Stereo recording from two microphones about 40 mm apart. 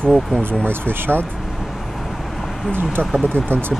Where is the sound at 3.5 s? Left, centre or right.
Right.